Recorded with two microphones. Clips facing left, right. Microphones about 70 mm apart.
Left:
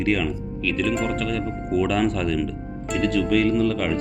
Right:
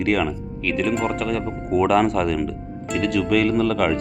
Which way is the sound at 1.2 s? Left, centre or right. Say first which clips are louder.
Right 2 dB; right.